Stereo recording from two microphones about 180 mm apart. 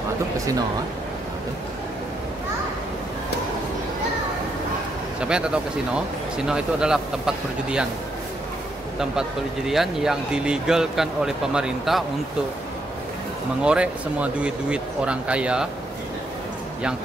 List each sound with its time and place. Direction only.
5.2 s speech: 5° right (ahead or behind)
9.7 s speech: centre (ahead or behind)
13.6 s speech: 5° right (ahead or behind)